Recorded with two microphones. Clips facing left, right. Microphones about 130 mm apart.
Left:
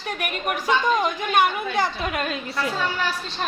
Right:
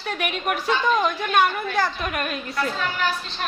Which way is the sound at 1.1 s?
15° left (ahead or behind).